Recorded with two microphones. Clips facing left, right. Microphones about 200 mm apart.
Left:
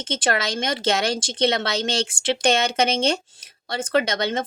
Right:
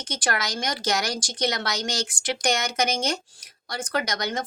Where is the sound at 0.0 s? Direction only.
25° left (ahead or behind).